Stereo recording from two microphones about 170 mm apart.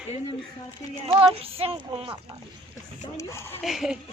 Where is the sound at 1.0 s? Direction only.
35° right (ahead or behind).